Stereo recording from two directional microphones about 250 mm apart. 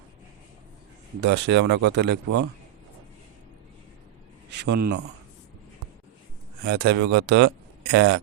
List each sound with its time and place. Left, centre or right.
1.2 s speech: right
4.6 s speech: right
6.7 s speech: right